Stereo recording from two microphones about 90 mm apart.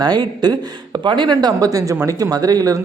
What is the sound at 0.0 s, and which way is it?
Speech, 55° right (ahead or behind).